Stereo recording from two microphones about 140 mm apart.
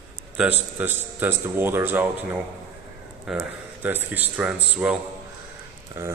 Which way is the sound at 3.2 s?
10° right (ahead or behind).